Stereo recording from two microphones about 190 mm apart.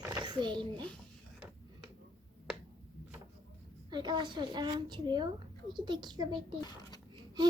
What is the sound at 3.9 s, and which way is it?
Speech, 25° right (ahead or behind).